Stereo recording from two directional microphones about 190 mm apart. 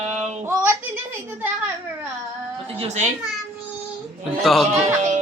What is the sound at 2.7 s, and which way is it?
Speech, 35° right (ahead or behind).